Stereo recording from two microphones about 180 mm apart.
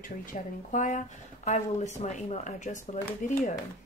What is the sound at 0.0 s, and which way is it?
Speech, 45° left (ahead or behind).